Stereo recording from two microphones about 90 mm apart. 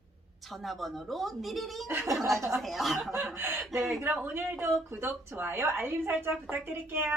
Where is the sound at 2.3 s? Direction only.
30° right (ahead or behind).